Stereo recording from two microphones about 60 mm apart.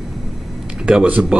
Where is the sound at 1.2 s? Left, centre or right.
Centre.